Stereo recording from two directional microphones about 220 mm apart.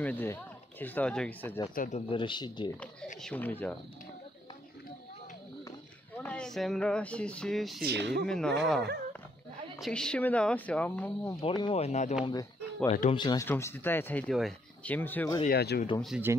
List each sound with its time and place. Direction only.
0.0 s speech: 10° left (ahead or behind)
1.8 s speech: 30° left (ahead or behind)
3.2 s speech: 5° left (ahead or behind)
6.1 s speech: 5° left (ahead or behind)
7.8 s speech: 50° right (ahead or behind)
8.3 s speech: 5° left (ahead or behind)
11.4 s speech: 25° left (ahead or behind)
12.3 s speech: 20° left (ahead or behind)
15.4 s speech: 45° left (ahead or behind)
16.0 s speech: 5° right (ahead or behind)